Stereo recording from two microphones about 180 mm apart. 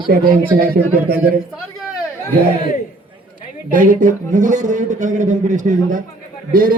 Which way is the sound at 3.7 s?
50° right (ahead or behind).